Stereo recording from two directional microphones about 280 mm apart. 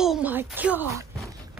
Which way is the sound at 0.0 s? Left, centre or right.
Centre.